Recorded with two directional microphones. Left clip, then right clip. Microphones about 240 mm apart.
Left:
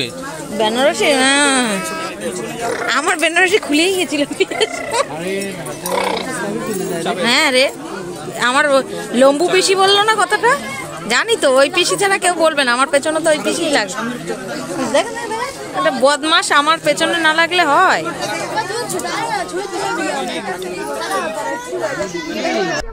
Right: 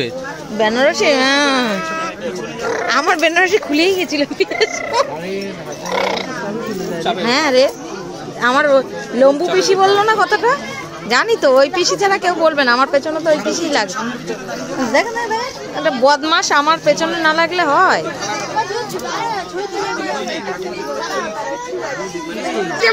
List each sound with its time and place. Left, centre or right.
0.6 s speech: centre
2.9 s speech: centre
5.9 s speech: centre
7.2 s speech: centre
15.0 s speech: centre